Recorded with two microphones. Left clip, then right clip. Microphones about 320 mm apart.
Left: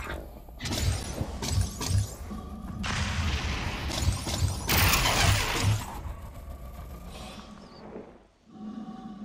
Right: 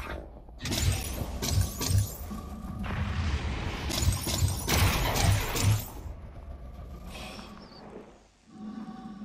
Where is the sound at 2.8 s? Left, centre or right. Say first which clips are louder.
Left 6 dB; left.